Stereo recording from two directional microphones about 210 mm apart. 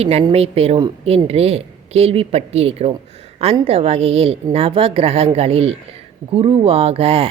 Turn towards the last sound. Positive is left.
turn(degrees=-30)  # may be behind; listen again after turning